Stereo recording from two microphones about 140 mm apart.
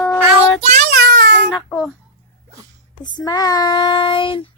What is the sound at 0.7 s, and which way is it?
Child singing, 75° right (ahead or behind).